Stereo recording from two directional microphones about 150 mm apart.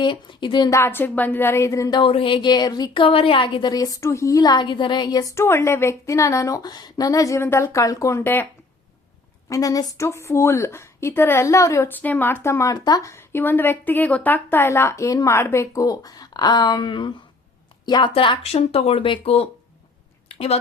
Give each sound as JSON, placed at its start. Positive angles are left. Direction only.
{"t": 0.0, "sound": "speech", "side_deg": 30}
{"t": 0.7, "sound": "a woman's voice", "side_deg": 15}
{"t": 9.5, "sound": "a woman's voice", "side_deg": 25}
{"t": 20.2, "sound": "a sound", "side_deg": 40}